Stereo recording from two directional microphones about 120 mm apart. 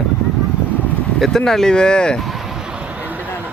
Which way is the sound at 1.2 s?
5° left (ahead or behind).